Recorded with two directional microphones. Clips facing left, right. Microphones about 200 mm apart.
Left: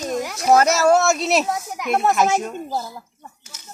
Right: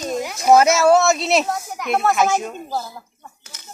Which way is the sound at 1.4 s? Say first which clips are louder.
Even; 5° left (ahead or behind).